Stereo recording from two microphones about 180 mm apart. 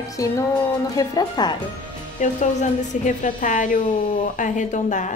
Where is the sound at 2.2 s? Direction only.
40° left (ahead or behind).